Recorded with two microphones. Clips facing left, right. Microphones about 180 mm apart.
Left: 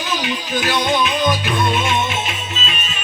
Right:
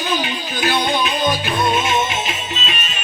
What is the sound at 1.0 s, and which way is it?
Music, 30° right (ahead or behind).